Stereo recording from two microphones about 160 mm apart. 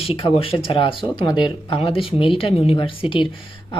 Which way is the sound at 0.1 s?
35° left (ahead or behind).